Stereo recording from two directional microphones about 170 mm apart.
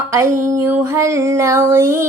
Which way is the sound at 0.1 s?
15° right (ahead or behind).